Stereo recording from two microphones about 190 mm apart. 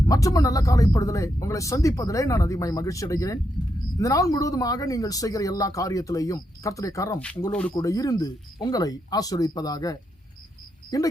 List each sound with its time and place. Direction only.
0.0 s speech: 20° left (ahead or behind)